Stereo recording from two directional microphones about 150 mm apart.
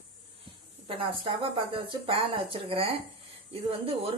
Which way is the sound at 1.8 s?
35° right (ahead or behind).